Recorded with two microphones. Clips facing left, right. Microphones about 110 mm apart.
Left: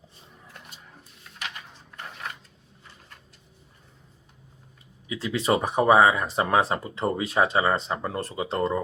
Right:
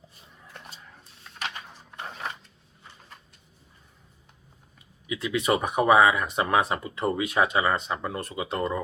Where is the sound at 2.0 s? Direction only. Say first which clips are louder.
Right 2 dB; 25° right (ahead or behind).